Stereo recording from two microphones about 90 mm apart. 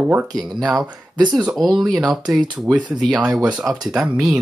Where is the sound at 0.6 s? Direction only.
10° right (ahead or behind).